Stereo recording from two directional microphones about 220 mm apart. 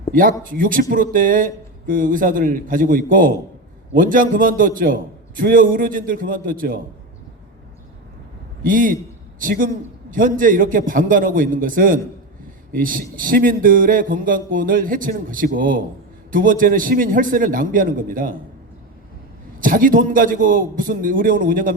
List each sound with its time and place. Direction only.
0.1 s a man's voice: 40° right (ahead or behind)
8.6 s a man's voice: 40° right (ahead or behind)
19.5 s a man's voice: 40° right (ahead or behind)